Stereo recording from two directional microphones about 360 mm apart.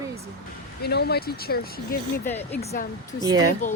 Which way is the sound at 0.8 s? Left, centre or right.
Left.